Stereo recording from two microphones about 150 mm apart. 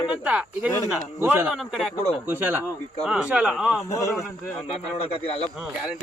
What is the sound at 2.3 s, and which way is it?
A man's voice, 15° right (ahead or behind).